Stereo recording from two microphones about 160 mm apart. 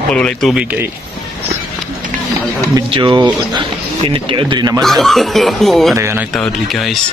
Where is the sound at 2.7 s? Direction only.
30° right (ahead or behind).